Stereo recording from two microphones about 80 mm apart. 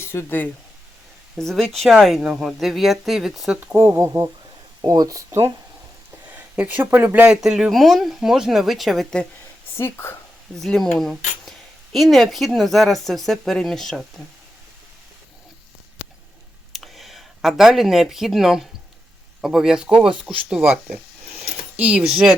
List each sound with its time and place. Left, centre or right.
0.0 s speech: left
1.4 s speech: centre
3.8 s speech: right
6.2 s speech: centre
7.3 s speech: centre
9.7 s speech: left
10.5 s speech: centre
16.7 s speech: centre
22.0 s speech: centre